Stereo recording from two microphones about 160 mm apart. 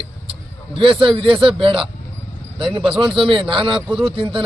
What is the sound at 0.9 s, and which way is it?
A man's voice, 35° right (ahead or behind).